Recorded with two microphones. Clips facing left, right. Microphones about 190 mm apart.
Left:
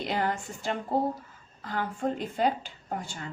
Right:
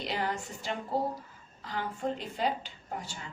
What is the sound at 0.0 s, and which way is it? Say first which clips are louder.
A woman's voice: left 4 dB; 50° left (ahead or behind).